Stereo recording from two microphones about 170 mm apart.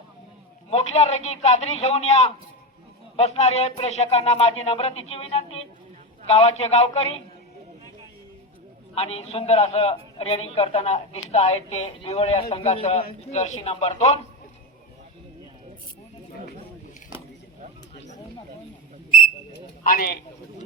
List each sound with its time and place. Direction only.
0.7 s a man's voice: 40° left (ahead or behind)
9.0 s a man's voice: 35° left (ahead or behind)
19.8 s a man's voice: 60° left (ahead or behind)